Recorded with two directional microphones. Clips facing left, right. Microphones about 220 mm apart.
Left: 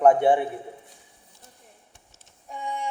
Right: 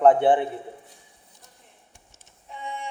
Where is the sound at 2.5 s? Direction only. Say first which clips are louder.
Left 3 dB; 45° left (ahead or behind).